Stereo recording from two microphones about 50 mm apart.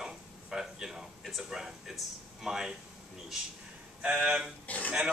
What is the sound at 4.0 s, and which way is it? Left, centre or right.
Speech, centre.